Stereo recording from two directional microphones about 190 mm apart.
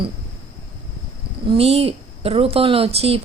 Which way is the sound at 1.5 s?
30° right (ahead or behind).